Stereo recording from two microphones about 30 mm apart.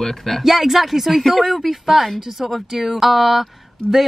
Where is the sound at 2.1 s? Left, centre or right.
Centre.